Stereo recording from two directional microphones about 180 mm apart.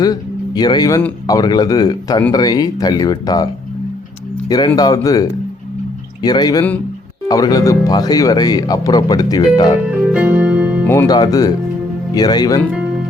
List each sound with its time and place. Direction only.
0.0 s speech: 20° left (ahead or behind)
9.9 s music: 5° right (ahead or behind)
10.8 s speech: 15° left (ahead or behind)